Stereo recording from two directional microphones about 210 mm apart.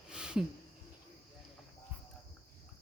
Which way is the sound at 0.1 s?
5° right (ahead or behind).